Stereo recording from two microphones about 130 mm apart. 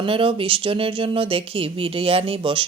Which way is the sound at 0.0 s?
45° right (ahead or behind).